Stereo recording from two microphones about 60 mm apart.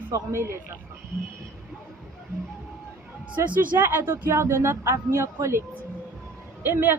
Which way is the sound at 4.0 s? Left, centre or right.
Right.